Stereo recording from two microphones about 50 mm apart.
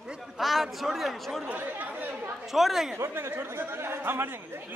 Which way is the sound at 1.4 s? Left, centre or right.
Right.